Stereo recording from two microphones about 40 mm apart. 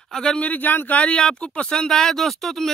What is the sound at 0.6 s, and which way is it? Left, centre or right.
Speech, left.